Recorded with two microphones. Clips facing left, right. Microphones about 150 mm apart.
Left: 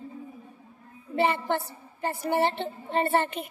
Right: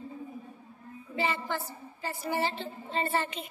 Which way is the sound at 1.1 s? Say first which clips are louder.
Left 6 dB; 60° left (ahead or behind).